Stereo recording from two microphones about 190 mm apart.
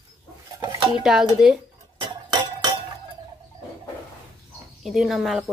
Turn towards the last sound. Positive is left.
turn(degrees=0)  # may be behind; listen again after turning